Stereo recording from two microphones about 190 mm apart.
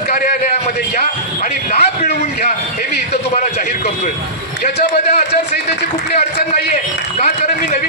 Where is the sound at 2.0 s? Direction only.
55° left (ahead or behind).